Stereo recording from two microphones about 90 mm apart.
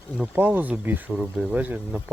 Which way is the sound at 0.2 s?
20° right (ahead or behind).